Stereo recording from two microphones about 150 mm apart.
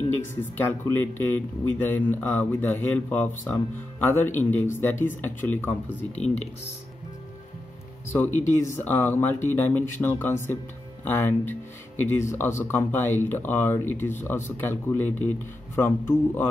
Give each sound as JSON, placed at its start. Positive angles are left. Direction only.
{"t": 0.4, "sound": "speech", "side_deg": 15}
{"t": 8.1, "sound": "speech", "side_deg": 15}